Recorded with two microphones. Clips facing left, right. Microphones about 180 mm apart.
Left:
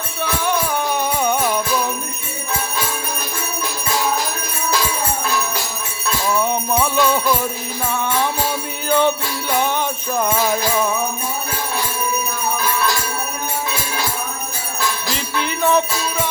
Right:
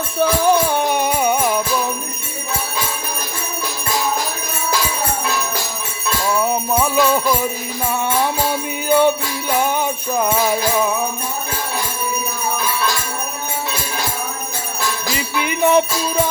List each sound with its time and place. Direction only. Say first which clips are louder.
0.2 s music: right 6 dB; 35° right (ahead or behind)
0.8 s music: right 3 dB; 20° right (ahead or behind)
1.2 s music: right 1 dB; 10° right (ahead or behind)
6.4 s jingle bell: right 1 dB; 5° right (ahead or behind)
8.9 s jingle bell: right 2 dB; 10° right (ahead or behind)
15.1 s jingle bell: right 1 dB; 10° right (ahead or behind)